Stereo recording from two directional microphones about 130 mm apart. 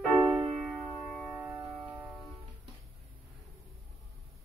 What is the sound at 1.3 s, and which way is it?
Music, 15° right (ahead or behind).